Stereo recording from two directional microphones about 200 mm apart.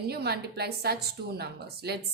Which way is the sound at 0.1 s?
55° right (ahead or behind).